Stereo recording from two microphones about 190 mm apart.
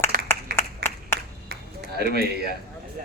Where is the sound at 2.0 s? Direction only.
55° right (ahead or behind).